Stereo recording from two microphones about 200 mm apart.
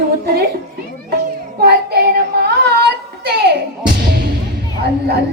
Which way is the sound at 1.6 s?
55° right (ahead or behind).